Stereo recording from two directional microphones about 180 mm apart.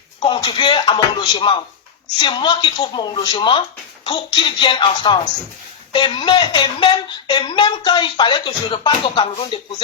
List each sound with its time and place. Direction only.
0.2 s a woman's voice: 25° left (ahead or behind)